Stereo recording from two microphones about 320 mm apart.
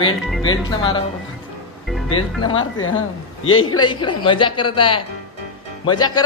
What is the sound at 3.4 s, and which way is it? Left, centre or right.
Speech, left.